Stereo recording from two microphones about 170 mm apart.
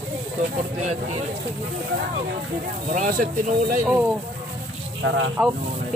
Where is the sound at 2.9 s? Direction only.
50° right (ahead or behind).